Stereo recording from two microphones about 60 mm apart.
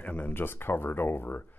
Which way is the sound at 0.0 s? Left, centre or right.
Left.